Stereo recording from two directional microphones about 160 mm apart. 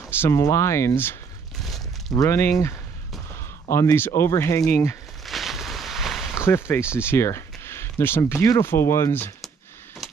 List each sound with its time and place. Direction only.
0.2 s speech: 20° left (ahead or behind)
1.6 s a sound: centre (ahead or behind)
2.1 s speech: 15° left (ahead or behind)
3.7 s speech: 15° left (ahead or behind)
5.2 s a sound: centre (ahead or behind)
6.3 s speech: 15° left (ahead or behind)